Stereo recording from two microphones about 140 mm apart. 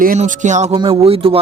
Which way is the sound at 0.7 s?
40° right (ahead or behind).